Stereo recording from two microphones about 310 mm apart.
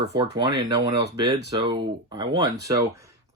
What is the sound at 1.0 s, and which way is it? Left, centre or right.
Speech, right.